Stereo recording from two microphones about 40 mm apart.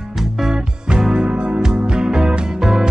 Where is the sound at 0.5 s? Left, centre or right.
Centre.